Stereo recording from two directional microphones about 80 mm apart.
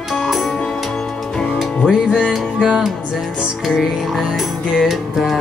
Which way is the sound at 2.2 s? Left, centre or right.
Centre.